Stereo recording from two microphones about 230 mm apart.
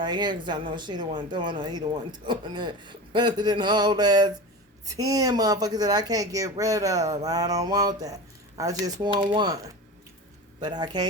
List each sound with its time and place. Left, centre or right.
0.0 s speech: centre
10.6 s speech: centre